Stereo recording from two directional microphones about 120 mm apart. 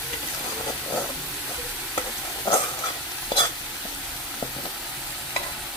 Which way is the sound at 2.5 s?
40° left (ahead or behind).